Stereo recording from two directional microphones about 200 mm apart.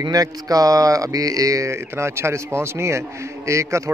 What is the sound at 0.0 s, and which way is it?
A man's voice, 20° right (ahead or behind).